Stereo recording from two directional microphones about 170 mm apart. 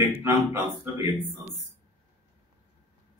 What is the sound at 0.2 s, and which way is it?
Speech, 20° right (ahead or behind).